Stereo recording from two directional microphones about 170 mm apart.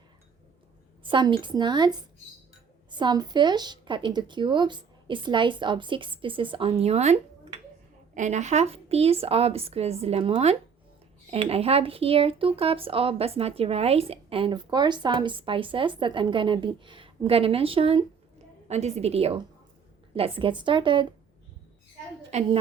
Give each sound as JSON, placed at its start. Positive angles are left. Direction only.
{"t": 1.0, "sound": "speech", "side_deg": -30}